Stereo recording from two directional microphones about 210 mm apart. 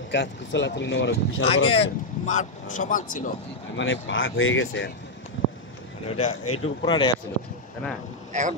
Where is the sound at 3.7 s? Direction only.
65° left (ahead or behind).